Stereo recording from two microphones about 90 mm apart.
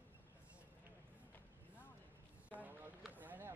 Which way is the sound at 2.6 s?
20° right (ahead or behind).